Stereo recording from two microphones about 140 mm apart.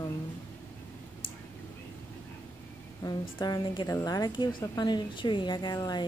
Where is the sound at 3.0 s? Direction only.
25° left (ahead or behind).